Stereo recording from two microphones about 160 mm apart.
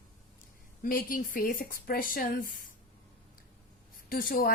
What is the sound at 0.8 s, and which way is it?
A woman's voice, 60° left (ahead or behind).